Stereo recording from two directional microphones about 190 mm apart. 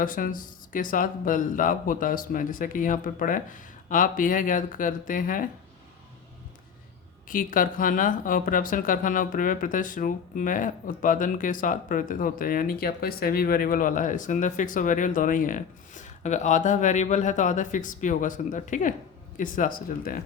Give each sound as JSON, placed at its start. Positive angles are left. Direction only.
{"t": 0.0, "sound": "speech", "side_deg": 45}
{"t": 7.3, "sound": "speech", "side_deg": 45}